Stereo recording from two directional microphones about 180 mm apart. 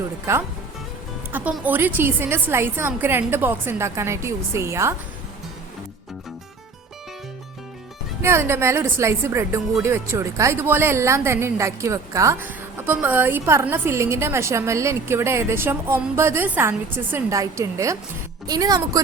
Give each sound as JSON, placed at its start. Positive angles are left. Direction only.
{"t": 1.3, "sound": "a woman's voice", "side_deg": -10}
{"t": 8.2, "sound": "a woman's voice", "side_deg": -15}